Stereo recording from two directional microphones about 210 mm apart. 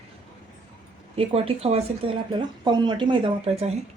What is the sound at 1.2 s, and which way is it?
A woman's voice, 30° right (ahead or behind).